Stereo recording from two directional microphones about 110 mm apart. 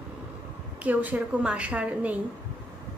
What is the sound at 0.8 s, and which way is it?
A woman's voice, 15° right (ahead or behind).